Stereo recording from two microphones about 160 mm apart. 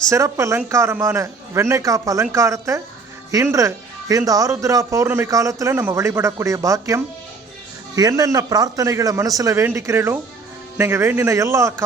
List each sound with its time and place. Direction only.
0.1 s a man's voice: 20° right (ahead or behind)